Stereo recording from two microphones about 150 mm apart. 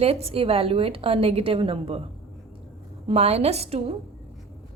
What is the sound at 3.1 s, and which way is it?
Speech, 45° right (ahead or behind).